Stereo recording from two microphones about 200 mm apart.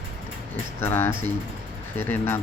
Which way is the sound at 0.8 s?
10° left (ahead or behind).